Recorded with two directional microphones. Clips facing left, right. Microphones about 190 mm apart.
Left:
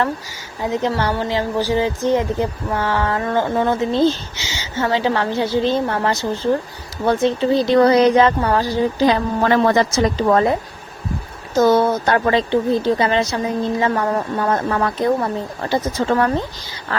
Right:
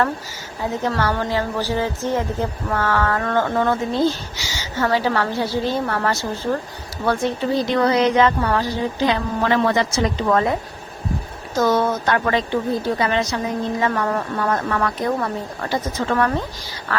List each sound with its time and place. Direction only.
0.7 s a woman's voice: 20° left (ahead or behind); by 10.5 s 35° left (ahead or behind)
11.5 s a woman's voice: 30° left (ahead or behind)